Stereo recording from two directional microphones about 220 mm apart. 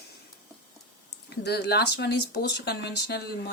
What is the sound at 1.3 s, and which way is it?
Speech, 50° left (ahead or behind).